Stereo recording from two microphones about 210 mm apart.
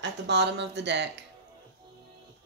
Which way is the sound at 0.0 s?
55° right (ahead or behind).